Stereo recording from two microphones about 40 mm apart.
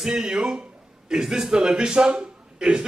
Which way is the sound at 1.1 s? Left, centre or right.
Centre.